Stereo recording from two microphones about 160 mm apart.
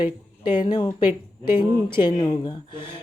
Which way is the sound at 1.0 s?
15° right (ahead or behind).